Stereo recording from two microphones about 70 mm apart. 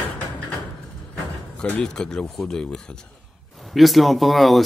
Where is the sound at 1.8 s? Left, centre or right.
Centre.